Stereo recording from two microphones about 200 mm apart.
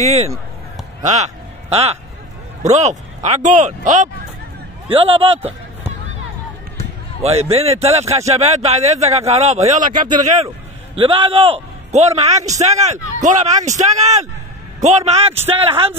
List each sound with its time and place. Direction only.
0.0 s a man's voice: 30° right (ahead or behind)
7.2 s a man's voice: 30° right (ahead or behind)